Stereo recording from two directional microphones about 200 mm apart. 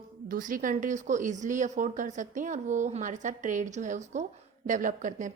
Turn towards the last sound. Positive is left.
turn(degrees=-40)  # may be behind; listen again after turning